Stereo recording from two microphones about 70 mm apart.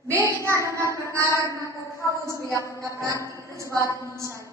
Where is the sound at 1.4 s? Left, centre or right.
Left.